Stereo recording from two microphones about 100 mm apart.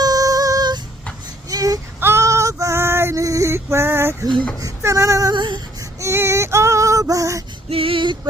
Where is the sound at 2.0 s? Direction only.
25° right (ahead or behind).